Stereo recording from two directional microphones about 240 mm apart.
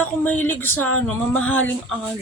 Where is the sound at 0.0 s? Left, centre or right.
Centre.